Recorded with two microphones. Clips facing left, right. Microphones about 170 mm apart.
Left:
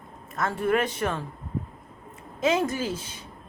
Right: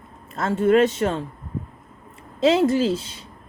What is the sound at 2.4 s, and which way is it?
Speech, 30° right (ahead or behind).